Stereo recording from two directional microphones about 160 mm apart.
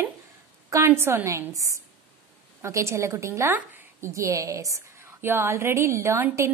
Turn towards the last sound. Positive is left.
turn(degrees=-15)  # may be behind; listen again after turning